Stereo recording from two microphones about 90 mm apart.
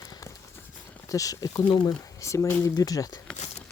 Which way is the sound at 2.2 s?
35° left (ahead or behind).